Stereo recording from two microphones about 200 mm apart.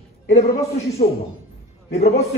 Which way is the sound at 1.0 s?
35° left (ahead or behind).